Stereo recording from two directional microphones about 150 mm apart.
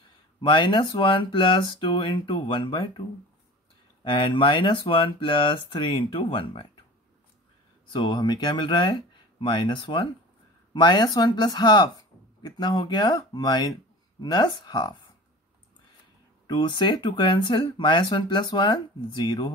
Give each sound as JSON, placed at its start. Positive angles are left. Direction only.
{"t": 0.4, "sound": "speech", "side_deg": 30}
{"t": 4.0, "sound": "speech", "side_deg": 35}
{"t": 7.9, "sound": "speech", "side_deg": 30}
{"t": 16.4, "sound": "speech", "side_deg": 30}